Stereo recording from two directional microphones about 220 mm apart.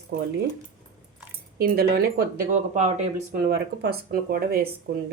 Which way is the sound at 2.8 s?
30° right (ahead or behind).